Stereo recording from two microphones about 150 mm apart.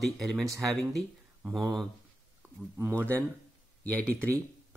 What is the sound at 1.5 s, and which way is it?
Speech, centre (ahead or behind).